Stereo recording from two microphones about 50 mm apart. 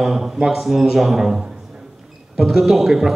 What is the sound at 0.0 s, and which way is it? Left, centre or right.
A man's voice, centre.